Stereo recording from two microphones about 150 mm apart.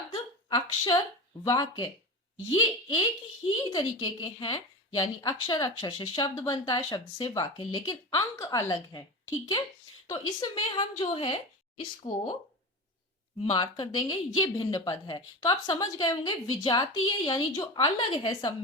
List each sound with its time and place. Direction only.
0.1 s a sound: 30° left (ahead or behind)
1.5 s a woman's voice: 25° left (ahead or behind)
3.6 s a woman's voice: 25° left (ahead or behind)
10.1 s a woman's voice: 30° left (ahead or behind)
13.4 s a woman's voice: 35° left (ahead or behind)